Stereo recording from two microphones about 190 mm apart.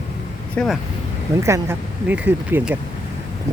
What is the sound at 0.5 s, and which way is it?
Speech, centre (ahead or behind).